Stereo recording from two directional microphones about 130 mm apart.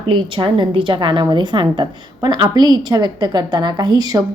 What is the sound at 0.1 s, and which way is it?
A woman's voice, 40° right (ahead or behind).